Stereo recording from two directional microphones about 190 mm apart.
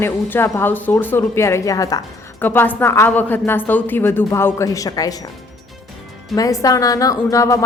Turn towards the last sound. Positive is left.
turn(degrees=15)  # may be behind; listen again after turning